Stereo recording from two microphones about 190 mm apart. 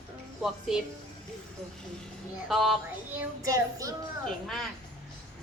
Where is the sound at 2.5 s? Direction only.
Centre (ahead or behind).